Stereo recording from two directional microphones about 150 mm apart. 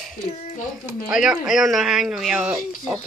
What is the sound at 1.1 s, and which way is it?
Speech, 5° right (ahead or behind).